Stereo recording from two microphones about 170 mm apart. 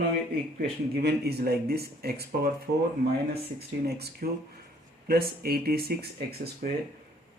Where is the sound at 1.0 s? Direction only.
70° right (ahead or behind).